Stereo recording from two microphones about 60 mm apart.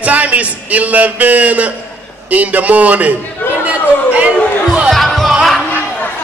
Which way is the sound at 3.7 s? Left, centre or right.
Right.